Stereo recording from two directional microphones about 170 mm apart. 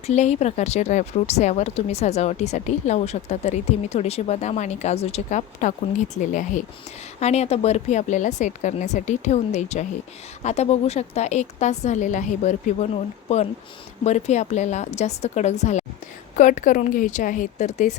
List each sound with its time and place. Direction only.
0.1 s a woman's voice: 40° left (ahead or behind)